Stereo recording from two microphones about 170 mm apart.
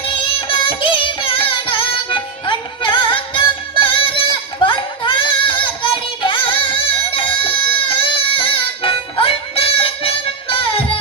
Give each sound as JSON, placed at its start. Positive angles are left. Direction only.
{"t": 0.0, "sound": "music", "side_deg": 30}
{"t": 4.6, "sound": "a sound", "side_deg": 30}
{"t": 5.8, "sound": "music", "side_deg": 30}